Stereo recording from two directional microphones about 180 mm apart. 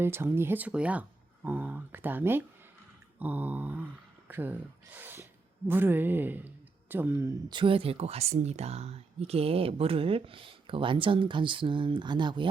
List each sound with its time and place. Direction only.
0.0 s speech: 15° right (ahead or behind)
7.5 s speech: 30° right (ahead or behind)